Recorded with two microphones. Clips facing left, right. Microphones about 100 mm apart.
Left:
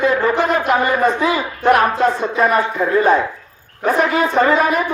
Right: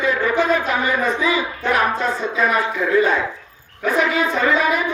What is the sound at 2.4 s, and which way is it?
A man's voice, 45° left (ahead or behind).